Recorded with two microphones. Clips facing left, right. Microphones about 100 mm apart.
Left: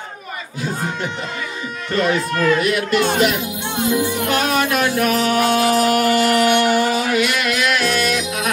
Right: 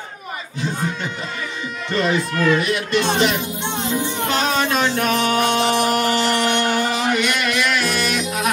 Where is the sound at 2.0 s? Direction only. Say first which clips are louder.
Left 1 dB; 5° left (ahead or behind).